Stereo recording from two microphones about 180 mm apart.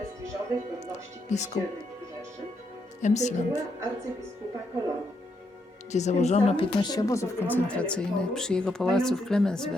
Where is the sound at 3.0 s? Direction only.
40° left (ahead or behind).